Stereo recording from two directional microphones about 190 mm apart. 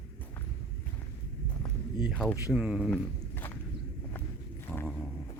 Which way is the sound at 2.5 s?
5° right (ahead or behind).